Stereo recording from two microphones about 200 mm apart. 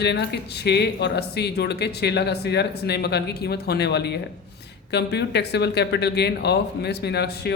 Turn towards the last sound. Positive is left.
turn(degrees=55)  # may be behind; listen again after turning